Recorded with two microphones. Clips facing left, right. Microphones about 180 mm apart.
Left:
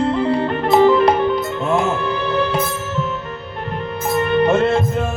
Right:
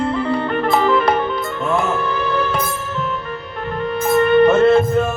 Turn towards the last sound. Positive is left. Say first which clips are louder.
# right 4 dB
turn(degrees=20)  # may be behind; listen again after turning